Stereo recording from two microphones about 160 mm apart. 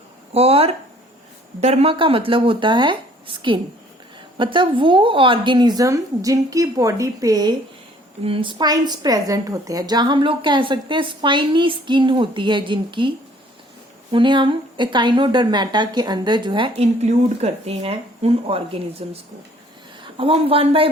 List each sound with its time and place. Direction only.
0.3 s a woman's voice: 40° right (ahead or behind)
8.2 s a woman's voice: 35° right (ahead or behind)